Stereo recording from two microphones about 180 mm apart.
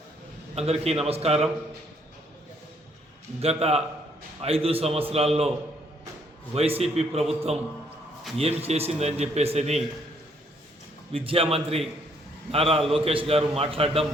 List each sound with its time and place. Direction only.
0.5 s a man's voice: 35° right (ahead or behind)
3.4 s a man's voice: 35° right (ahead or behind)
6.5 s a man's voice: 35° right (ahead or behind)
8.4 s a man's voice: 35° right (ahead or behind)
11.1 s a man's voice: 30° right (ahead or behind)